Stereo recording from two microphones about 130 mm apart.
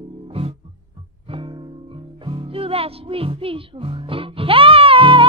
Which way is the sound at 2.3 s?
45° right (ahead or behind).